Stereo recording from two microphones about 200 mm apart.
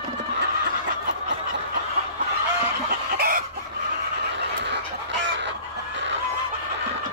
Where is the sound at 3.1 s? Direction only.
45° right (ahead or behind).